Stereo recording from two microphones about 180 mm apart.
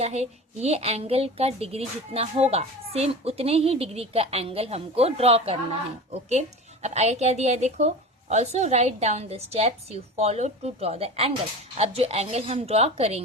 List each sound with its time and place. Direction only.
0.0 s speech: 35° right (ahead or behind)
6.8 s speech: 40° right (ahead or behind)